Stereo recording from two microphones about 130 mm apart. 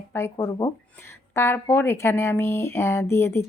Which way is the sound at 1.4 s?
20° left (ahead or behind).